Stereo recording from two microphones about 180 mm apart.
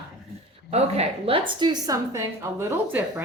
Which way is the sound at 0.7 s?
35° right (ahead or behind).